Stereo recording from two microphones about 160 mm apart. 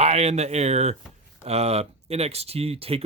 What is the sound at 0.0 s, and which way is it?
A man's voice, 40° right (ahead or behind).